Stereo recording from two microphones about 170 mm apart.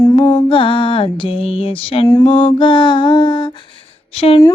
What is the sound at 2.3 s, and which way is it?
Child singing, 30° left (ahead or behind).